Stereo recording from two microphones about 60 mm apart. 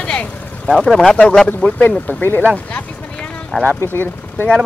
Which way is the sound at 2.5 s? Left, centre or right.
Left.